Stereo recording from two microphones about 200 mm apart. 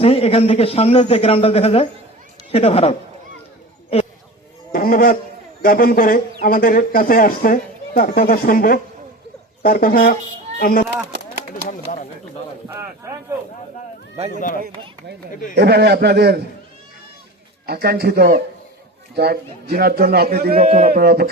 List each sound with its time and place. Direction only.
0.0 s a man's voice: 30° left (ahead or behind)
4.7 s a sound: 50° left (ahead or behind)
5.6 s a man's voice: 45° left (ahead or behind)
12.6 s speech: 15° right (ahead or behind)
14.3 s a man's voice: 40° left (ahead or behind)
15.5 s a man's voice: 55° right (ahead or behind)
17.7 s a man's voice: 55° right (ahead or behind)
20.6 s a man's voice: 35° right (ahead or behind)
20.8 s a man's voice: 50° right (ahead or behind)